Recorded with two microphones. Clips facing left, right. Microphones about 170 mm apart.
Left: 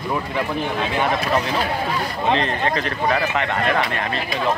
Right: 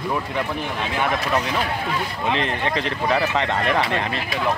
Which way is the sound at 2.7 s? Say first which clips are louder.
Even; 20° right (ahead or behind).